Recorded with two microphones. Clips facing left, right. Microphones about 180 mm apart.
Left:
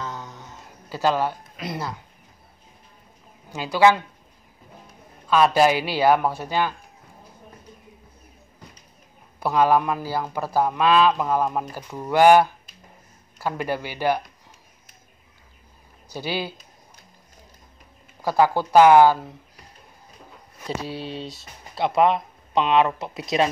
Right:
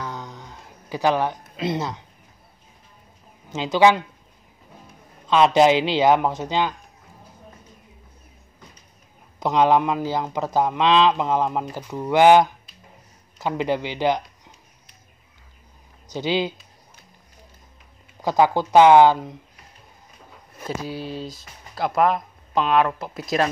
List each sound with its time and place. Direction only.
0.0 s a sound: 15° right (ahead or behind)
3.5 s a man's voice: 20° right (ahead or behind)
5.3 s a man's voice: 20° right (ahead or behind)
9.4 s a man's voice: 20° right (ahead or behind)
16.1 s speech: 20° right (ahead or behind)
18.2 s speech: 15° right (ahead or behind)
20.9 s speech: 30° left (ahead or behind)
21.2 s speech: centre (ahead or behind)